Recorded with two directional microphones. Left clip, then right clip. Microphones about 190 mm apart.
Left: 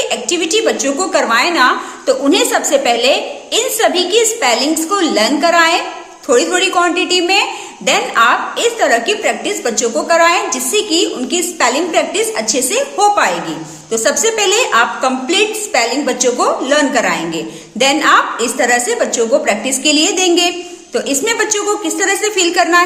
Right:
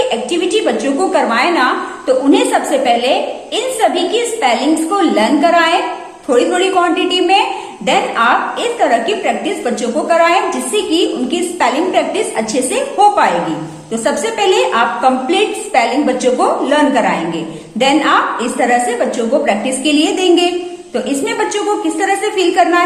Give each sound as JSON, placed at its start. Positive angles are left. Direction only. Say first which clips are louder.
{"t": 0.1, "sound": "a woman's voice", "louder": "even", "side_deg": 30}